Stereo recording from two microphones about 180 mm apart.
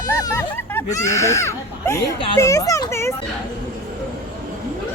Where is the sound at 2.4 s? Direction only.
20° left (ahead or behind).